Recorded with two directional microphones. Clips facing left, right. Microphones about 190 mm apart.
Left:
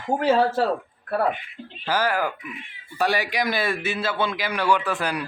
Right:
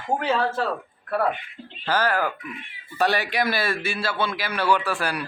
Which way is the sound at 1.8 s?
10° left (ahead or behind).